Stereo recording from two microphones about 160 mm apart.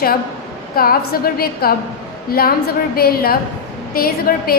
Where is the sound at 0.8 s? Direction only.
65° left (ahead or behind).